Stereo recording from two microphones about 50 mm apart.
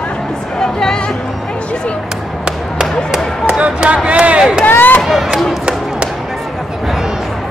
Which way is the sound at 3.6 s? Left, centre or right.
Right.